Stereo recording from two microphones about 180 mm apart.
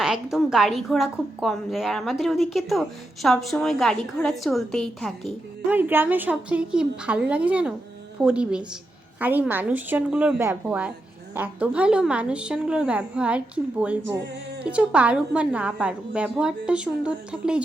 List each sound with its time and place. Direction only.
0.0 s a woman's voice: 5° right (ahead or behind)
5.7 s a woman's voice: 10° right (ahead or behind)
14.0 s music: 75° right (ahead or behind)
14.6 s a woman's voice: 5° right (ahead or behind)